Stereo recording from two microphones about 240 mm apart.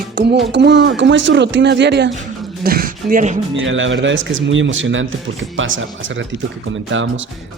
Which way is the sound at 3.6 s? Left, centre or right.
Right.